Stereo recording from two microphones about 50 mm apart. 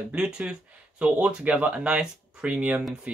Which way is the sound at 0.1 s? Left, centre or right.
Centre.